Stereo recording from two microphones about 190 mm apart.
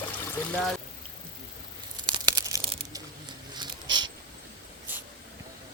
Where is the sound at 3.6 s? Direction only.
25° right (ahead or behind).